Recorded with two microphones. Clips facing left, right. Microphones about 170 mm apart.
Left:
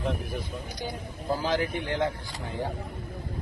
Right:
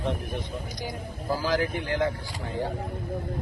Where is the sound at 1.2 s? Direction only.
20° left (ahead or behind).